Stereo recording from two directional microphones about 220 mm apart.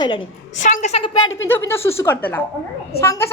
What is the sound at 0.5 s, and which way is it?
Speech, 35° left (ahead or behind).